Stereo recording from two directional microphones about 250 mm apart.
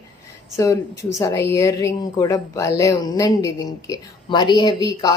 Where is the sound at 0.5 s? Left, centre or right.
Centre.